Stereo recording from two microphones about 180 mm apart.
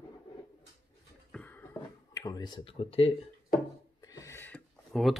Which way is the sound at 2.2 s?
20° left (ahead or behind).